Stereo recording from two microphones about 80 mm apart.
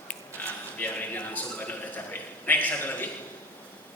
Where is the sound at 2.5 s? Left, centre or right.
Left.